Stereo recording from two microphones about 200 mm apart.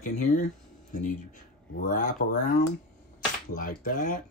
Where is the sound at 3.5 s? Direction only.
45° left (ahead or behind).